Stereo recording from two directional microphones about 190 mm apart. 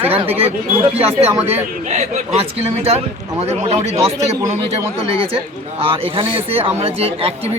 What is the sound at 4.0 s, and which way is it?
Speech, 15° right (ahead or behind).